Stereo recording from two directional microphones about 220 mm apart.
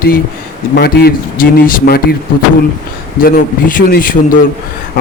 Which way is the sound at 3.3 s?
40° left (ahead or behind).